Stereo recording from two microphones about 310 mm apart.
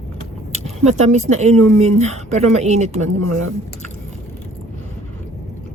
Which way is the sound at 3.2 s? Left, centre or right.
Right.